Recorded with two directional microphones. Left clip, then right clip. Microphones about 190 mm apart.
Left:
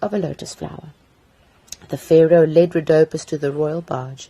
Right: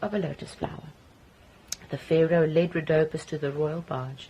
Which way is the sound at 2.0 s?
50° left (ahead or behind).